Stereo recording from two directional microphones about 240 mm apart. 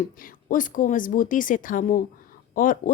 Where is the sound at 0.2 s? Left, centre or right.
Left.